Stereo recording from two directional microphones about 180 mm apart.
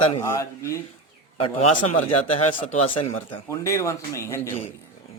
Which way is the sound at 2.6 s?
30° left (ahead or behind).